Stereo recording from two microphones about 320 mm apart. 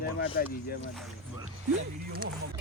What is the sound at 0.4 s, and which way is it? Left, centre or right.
Speech, left.